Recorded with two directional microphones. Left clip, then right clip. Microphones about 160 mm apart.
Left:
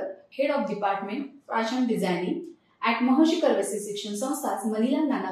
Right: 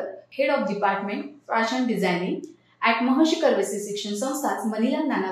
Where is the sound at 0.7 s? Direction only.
15° left (ahead or behind).